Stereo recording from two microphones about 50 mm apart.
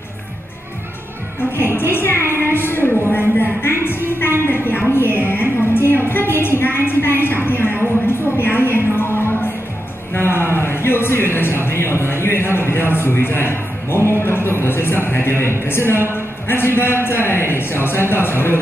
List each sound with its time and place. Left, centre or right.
1.6 s a man's voice: left
4.5 s music: left
6.0 s a sound: left
14.2 s a man's voice: left